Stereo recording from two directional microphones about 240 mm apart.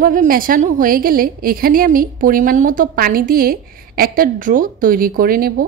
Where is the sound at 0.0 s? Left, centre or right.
Right.